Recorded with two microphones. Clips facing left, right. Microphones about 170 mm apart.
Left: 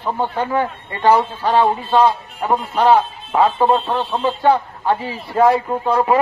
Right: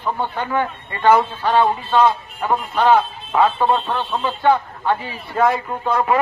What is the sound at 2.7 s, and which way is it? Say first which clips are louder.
A man's voice: left 1 dB; 35° left (ahead or behind).